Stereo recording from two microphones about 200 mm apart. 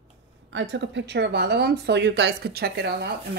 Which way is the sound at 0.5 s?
65° right (ahead or behind).